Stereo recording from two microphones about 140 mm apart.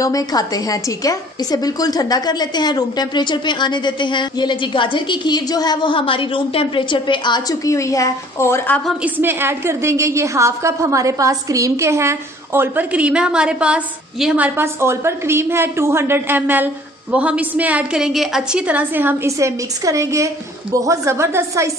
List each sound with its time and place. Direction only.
0.0 s a woman's voice: 25° left (ahead or behind)
9.0 s a woman's voice: 15° right (ahead or behind)